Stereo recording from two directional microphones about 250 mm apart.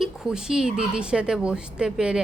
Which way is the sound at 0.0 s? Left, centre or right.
Centre.